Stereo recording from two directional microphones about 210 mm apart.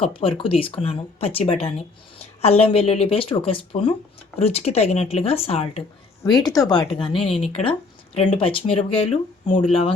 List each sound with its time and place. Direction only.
0.0 s speech: 25° left (ahead or behind)
6.2 s speech: 20° left (ahead or behind)